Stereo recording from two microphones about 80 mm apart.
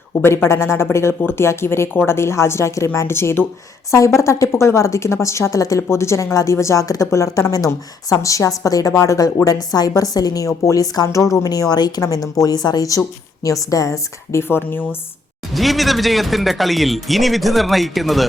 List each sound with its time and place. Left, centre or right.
0.4 s a woman's voice: left
12.0 s a woman's voice: left
14.4 s speech: left
15.5 s speech: centre